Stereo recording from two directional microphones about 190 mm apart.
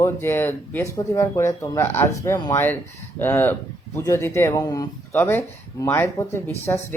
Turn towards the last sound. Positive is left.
turn(degrees=10)  # may be behind; listen again after turning